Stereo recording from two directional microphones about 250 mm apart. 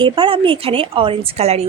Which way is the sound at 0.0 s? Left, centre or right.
Centre.